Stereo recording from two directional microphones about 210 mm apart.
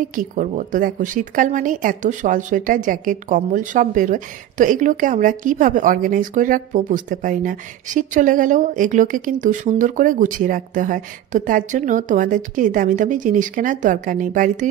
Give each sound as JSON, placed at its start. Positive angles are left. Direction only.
{"t": 0.0, "sound": "speech", "side_deg": -40}